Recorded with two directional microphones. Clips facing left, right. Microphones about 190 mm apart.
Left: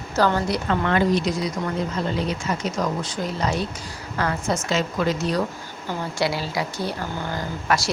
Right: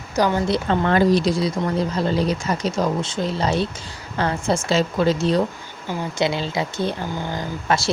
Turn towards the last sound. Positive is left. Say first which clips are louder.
# right 2 dB
turn(degrees=-25)  # may be behind; listen again after turning